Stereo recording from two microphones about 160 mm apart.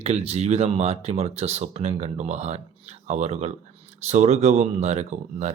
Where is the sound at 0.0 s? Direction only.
40° right (ahead or behind).